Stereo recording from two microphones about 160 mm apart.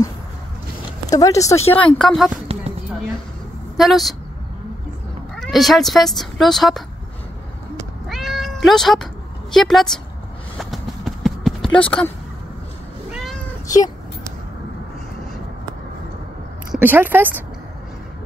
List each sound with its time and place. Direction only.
1.1 s speech: 20° left (ahead or behind)
1.7 s speech: 10° left (ahead or behind)
3.7 s speech: centre (ahead or behind)
5.3 s speech: centre (ahead or behind)
8.1 s cat: centre (ahead or behind)
9.5 s speech: centre (ahead or behind)
10.6 s a sound: centre (ahead or behind)
13.1 s cat: centre (ahead or behind)
16.7 s speech: 10° right (ahead or behind)